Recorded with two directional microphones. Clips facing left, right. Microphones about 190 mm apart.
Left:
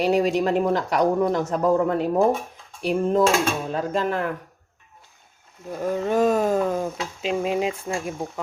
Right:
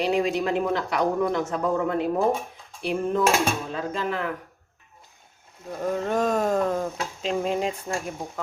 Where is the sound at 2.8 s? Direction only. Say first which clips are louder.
Left 4 dB; 40° left (ahead or behind).